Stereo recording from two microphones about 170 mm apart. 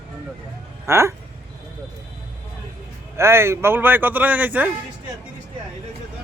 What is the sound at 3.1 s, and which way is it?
A man's voice, 15° right (ahead or behind).